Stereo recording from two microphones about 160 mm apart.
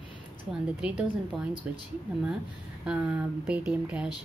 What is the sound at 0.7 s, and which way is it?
Speech, 5° right (ahead or behind).